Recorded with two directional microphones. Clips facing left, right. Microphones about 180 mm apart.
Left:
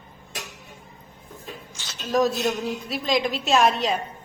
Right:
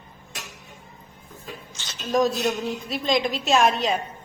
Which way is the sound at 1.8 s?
10° left (ahead or behind).